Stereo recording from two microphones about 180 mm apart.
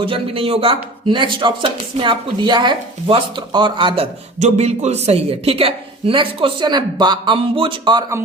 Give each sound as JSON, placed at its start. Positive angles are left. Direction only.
{"t": 0.0, "sound": "speech", "side_deg": -30}